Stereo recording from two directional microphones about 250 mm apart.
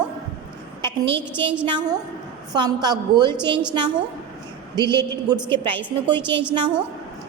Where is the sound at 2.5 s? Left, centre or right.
Centre.